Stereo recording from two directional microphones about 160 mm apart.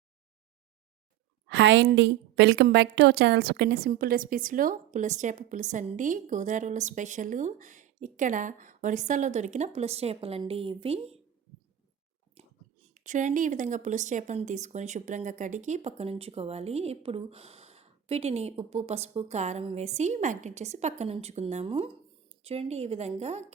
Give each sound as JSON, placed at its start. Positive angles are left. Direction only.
{"t": 1.5, "sound": "a woman's voice", "side_deg": -90}
{"t": 12.9, "sound": "a woman's voice", "side_deg": -50}